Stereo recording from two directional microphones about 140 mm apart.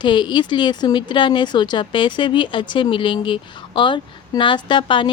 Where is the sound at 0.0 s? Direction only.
35° left (ahead or behind).